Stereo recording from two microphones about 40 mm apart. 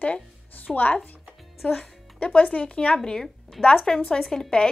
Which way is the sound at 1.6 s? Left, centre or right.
Left.